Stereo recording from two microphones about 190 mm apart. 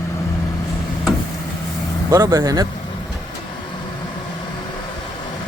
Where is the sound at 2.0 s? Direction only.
20° right (ahead or behind).